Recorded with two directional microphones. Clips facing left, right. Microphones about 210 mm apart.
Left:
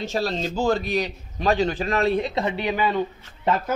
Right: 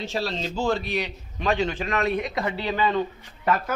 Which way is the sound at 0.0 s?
45° left (ahead or behind).